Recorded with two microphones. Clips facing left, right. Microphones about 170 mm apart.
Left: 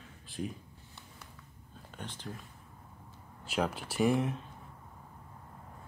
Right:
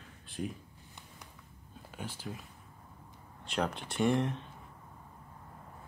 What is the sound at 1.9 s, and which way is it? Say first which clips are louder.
Speech: right 2 dB; 10° right (ahead or behind).